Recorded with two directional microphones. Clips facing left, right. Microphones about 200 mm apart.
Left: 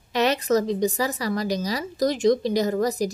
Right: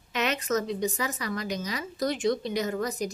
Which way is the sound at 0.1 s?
35° left (ahead or behind).